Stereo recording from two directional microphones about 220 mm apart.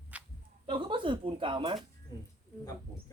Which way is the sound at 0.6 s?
25° right (ahead or behind).